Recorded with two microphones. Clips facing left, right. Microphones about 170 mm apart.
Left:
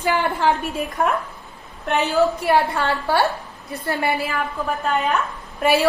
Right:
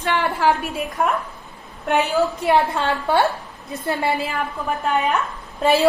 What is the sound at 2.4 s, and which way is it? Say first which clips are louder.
A woman's voice: right 1 dB; 20° right (ahead or behind).